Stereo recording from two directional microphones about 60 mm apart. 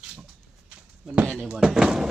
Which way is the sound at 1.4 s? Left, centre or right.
Centre.